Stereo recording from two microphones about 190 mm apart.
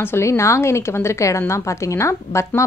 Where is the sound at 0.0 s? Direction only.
15° left (ahead or behind).